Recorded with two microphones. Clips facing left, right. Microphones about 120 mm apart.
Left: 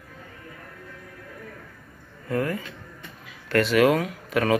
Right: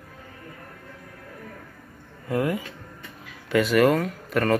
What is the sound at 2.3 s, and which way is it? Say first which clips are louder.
Speech: right 1 dB; 15° right (ahead or behind).